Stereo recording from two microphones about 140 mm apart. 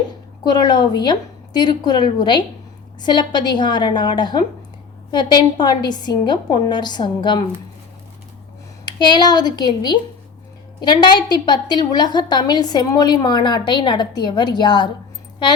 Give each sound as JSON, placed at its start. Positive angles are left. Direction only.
{"t": 0.4, "sound": "a woman's voice", "side_deg": 30}
{"t": 8.8, "sound": "a woman's voice", "side_deg": 30}